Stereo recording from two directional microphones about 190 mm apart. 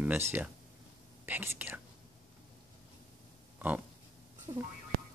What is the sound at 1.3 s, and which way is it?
Whispering, 10° right (ahead or behind).